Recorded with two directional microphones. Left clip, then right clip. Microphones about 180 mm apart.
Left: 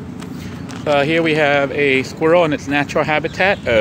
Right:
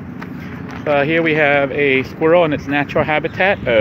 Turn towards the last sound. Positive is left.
turn(degrees=0)  # may be behind; listen again after turning